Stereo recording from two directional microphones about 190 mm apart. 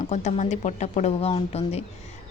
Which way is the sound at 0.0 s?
40° left (ahead or behind).